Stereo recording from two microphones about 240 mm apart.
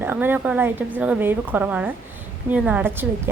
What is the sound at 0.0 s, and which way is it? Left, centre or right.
A woman's voice, centre.